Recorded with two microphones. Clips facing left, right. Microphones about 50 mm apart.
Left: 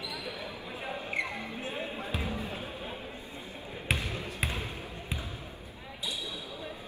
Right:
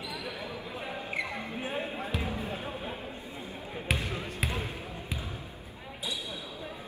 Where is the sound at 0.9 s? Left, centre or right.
Centre.